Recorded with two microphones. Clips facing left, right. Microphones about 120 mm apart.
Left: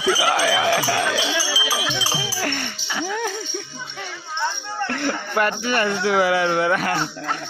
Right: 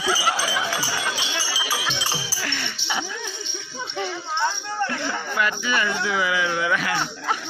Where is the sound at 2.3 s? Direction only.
50° left (ahead or behind).